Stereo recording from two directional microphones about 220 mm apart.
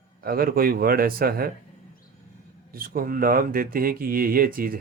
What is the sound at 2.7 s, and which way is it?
Speech, 40° right (ahead or behind).